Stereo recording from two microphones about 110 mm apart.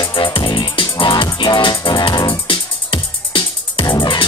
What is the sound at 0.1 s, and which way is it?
Music, 50° left (ahead or behind).